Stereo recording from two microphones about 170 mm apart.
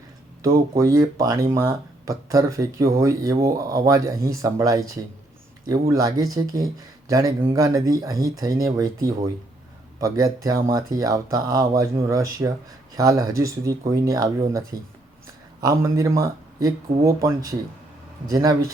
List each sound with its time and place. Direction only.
0.4 s speech: 20° right (ahead or behind)
5.9 s speech: 20° right (ahead or behind)
15.6 s speech: 20° right (ahead or behind)